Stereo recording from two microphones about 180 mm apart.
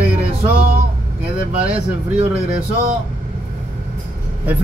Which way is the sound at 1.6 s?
30° right (ahead or behind).